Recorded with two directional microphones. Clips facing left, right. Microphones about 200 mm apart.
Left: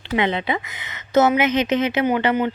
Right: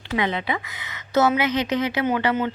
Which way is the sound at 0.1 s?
25° left (ahead or behind).